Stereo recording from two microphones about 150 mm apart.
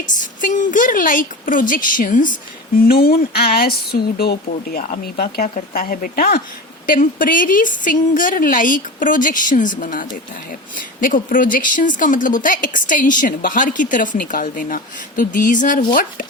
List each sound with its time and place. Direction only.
0.0 s a woman's voice: 60° left (ahead or behind)